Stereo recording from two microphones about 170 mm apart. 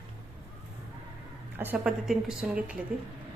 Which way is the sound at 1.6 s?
10° right (ahead or behind).